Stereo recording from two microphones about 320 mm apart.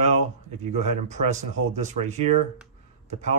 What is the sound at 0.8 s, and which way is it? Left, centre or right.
Speech, right.